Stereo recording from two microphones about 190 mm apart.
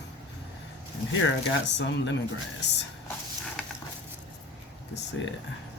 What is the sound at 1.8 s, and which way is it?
Speech, 70° left (ahead or behind).